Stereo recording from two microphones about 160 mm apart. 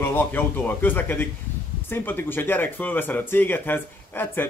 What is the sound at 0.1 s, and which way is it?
Speech, 10° left (ahead or behind).